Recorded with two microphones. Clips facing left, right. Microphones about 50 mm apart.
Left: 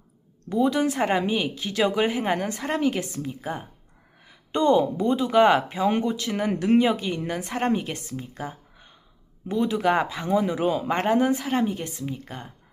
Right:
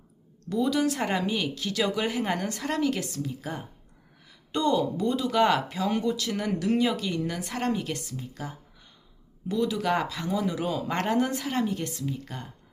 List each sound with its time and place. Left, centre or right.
0.5 s speech: left